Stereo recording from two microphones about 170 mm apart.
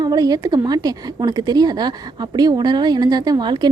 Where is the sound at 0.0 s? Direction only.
25° right (ahead or behind).